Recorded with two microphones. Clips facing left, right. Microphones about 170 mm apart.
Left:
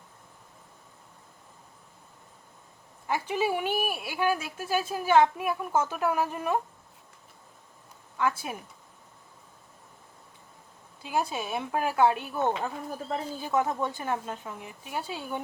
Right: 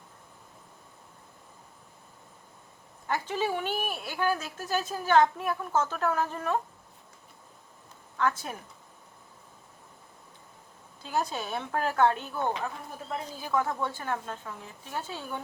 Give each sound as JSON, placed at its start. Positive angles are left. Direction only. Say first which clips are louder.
{"t": 3.1, "sound": "speech", "louder": "left 2 dB", "side_deg": 10}
{"t": 8.2, "sound": "speech", "louder": "even", "side_deg": 10}
{"t": 11.0, "sound": "speech", "louder": "left 1 dB", "side_deg": 10}
{"t": 12.6, "sound": "speech", "louder": "left 3 dB", "side_deg": 25}